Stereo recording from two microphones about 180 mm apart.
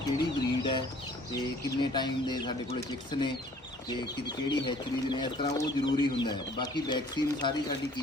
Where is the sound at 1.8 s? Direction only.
25° left (ahead or behind).